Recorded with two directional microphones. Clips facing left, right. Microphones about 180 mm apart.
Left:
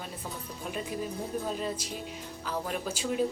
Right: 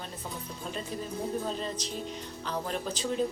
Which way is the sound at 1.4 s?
10° left (ahead or behind).